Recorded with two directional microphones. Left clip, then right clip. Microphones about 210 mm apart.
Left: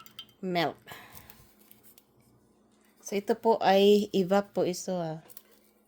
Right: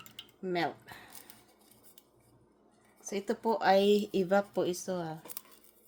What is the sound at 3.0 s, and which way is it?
Speech, 40° left (ahead or behind).